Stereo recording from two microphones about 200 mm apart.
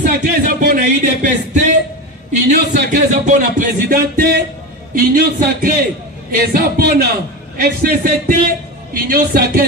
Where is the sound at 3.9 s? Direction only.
50° right (ahead or behind).